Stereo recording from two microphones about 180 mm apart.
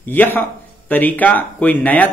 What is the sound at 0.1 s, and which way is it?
Speech, 10° left (ahead or behind).